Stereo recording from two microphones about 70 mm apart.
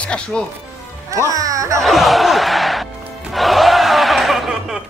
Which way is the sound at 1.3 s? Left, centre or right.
Right.